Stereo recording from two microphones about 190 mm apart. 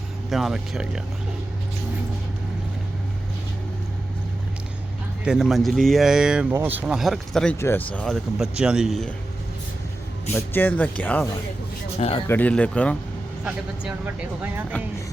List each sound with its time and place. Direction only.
0.3 s speech: centre (ahead or behind)
5.2 s speech: 5° right (ahead or behind)
10.3 s speech: 10° left (ahead or behind)
11.9 s speech: 30° left (ahead or behind)
12.3 s speech: 5° left (ahead or behind)
13.4 s speech: 5° right (ahead or behind)